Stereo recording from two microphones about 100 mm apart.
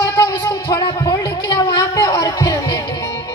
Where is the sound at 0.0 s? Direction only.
30° left (ahead or behind).